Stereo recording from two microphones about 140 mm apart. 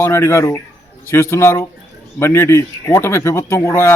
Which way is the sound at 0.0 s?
20° left (ahead or behind).